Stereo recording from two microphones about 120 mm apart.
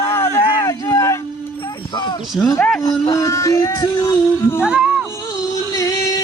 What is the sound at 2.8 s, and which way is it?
Music, 35° left (ahead or behind).